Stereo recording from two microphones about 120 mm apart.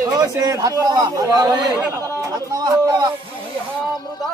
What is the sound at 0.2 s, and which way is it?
A man's voice, 30° right (ahead or behind).